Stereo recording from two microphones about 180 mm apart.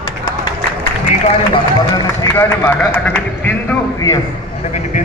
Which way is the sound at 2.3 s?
15° left (ahead or behind).